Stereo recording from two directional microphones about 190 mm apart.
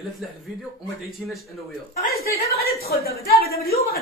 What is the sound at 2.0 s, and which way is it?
A woman's voice, 55° left (ahead or behind).